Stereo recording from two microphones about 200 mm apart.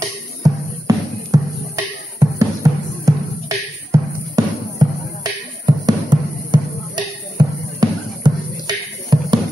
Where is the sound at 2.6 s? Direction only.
15° right (ahead or behind).